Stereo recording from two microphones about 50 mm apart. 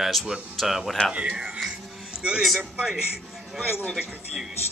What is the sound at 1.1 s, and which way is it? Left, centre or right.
A man's voice, right.